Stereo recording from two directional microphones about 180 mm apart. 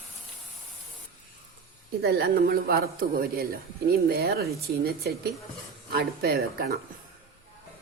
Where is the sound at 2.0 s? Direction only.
60° right (ahead or behind).